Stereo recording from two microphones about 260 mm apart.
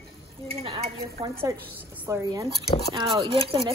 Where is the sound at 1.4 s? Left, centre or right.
Centre.